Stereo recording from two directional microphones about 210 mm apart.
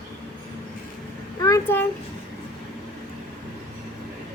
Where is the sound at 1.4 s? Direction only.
15° left (ahead or behind).